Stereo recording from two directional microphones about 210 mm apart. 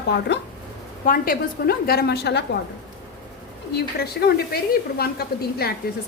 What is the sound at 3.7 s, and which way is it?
A woman's voice, 50° left (ahead or behind).